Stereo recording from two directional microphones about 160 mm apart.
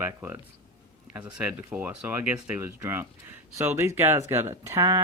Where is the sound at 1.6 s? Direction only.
15° right (ahead or behind).